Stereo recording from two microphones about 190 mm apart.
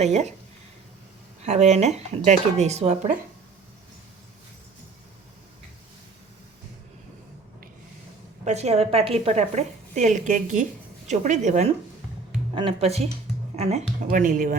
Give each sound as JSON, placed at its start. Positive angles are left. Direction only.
{"t": 0.0, "sound": "a woman's voice", "side_deg": -35}
{"t": 1.4, "sound": "a woman's voice", "side_deg": -35}
{"t": 8.4, "sound": "a woman's voice", "side_deg": -35}
{"t": 14.1, "sound": "speech", "side_deg": -45}